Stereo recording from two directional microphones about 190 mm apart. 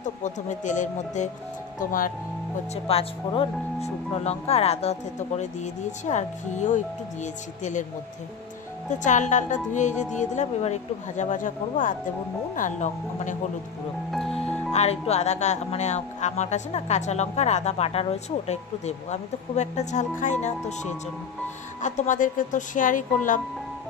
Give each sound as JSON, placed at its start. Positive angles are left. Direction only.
{"t": 0.0, "sound": "speech", "side_deg": 40}
{"t": 2.7, "sound": "speech", "side_deg": 30}
{"t": 9.0, "sound": "speech", "side_deg": 40}
{"t": 14.7, "sound": "speech", "side_deg": 35}